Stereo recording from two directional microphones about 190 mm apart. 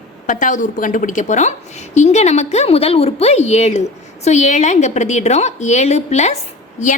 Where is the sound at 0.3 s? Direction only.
45° left (ahead or behind).